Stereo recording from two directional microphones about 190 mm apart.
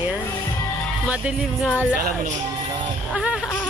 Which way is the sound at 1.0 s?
5° right (ahead or behind).